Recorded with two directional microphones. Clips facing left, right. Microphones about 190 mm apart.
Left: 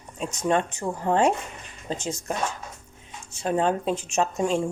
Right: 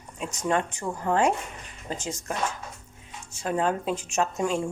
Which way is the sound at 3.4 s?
25° left (ahead or behind).